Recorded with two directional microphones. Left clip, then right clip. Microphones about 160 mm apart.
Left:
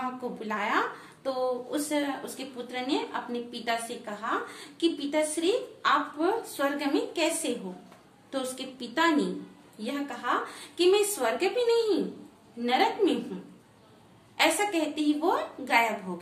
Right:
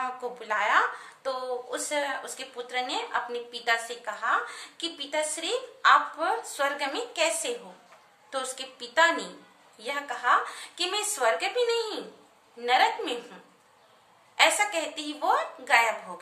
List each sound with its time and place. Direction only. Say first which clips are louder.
0.0 s speech: right 1 dB; 10° right (ahead or behind)
14.3 s speech: right 2 dB; 15° right (ahead or behind)